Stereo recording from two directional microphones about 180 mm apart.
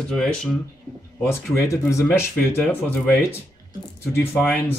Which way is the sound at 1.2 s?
15° left (ahead or behind).